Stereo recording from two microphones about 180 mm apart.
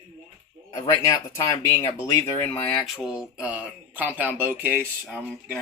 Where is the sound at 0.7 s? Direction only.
20° left (ahead or behind).